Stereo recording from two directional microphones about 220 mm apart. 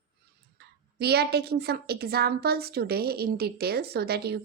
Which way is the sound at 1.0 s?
45° right (ahead or behind).